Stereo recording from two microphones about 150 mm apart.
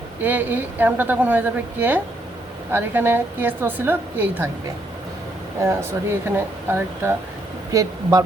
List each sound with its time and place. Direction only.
0.2 s a woman's voice: 10° right (ahead or behind)
5.5 s a woman's voice: 20° right (ahead or behind)